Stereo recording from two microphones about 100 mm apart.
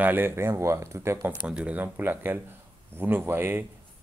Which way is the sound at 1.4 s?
10° right (ahead or behind).